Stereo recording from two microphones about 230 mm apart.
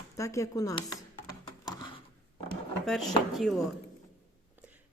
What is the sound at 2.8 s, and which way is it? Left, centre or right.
Speech, centre.